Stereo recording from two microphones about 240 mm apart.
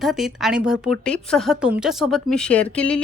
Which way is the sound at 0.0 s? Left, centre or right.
Centre.